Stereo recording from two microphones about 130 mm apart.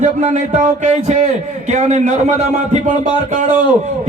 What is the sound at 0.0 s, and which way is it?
A man's voice, 65° right (ahead or behind).